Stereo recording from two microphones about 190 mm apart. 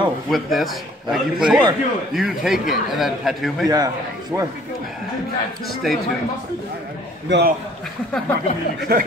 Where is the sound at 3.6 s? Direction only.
20° right (ahead or behind).